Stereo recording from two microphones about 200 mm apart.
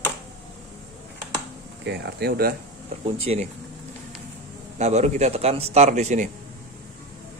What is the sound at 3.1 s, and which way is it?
Speech, 30° right (ahead or behind).